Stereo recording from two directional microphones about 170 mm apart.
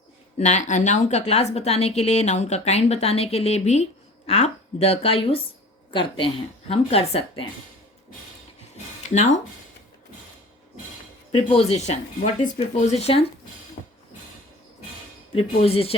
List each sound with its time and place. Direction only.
0.3 s a woman's voice: 45° left (ahead or behind)
9.1 s speech: 45° left (ahead or behind)
11.3 s a woman's voice: 40° left (ahead or behind)
13.8 s mechanisms: 45° left (ahead or behind)
15.4 s a woman's voice: 35° left (ahead or behind)